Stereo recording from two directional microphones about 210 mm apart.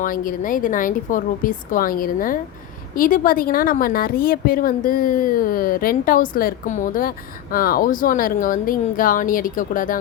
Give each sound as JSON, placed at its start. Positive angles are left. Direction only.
{"t": 0.0, "sound": "a woman's voice", "side_deg": 40}